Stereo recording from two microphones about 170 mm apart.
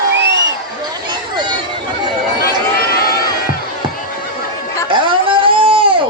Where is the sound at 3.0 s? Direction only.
65° left (ahead or behind).